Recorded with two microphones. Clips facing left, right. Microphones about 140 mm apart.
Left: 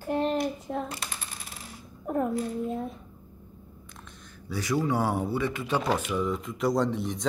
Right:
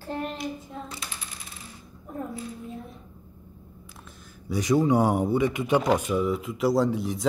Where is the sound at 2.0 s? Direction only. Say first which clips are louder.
Left 8 dB; 75° left (ahead or behind).